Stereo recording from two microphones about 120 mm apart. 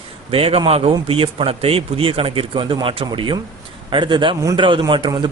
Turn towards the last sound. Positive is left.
turn(degrees=-40)  # may be behind; listen again after turning